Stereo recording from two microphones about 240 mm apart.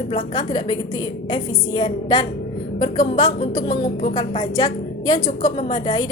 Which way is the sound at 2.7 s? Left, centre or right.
Centre.